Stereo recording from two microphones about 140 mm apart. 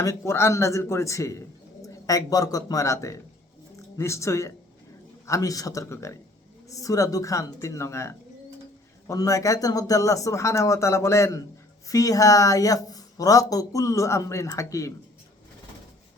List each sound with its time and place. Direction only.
0.0 s a man's voice: 20° left (ahead or behind)